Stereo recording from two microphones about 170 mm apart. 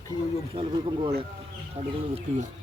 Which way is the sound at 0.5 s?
35° right (ahead or behind).